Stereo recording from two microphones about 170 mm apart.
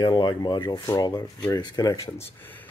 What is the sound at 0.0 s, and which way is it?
Speech, 25° left (ahead or behind).